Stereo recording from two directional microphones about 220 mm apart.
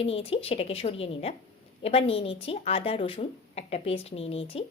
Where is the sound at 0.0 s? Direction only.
25° left (ahead or behind).